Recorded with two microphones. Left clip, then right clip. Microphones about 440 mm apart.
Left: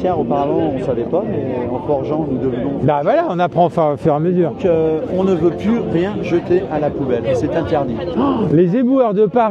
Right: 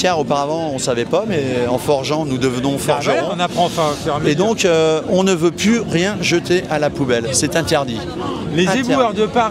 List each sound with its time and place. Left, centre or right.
0.1 s speech: right
2.9 s speech: left
4.6 s speech: right
8.5 s speech: centre